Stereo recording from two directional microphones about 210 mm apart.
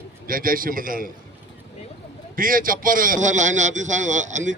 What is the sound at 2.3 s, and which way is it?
A man's voice, 40° right (ahead or behind).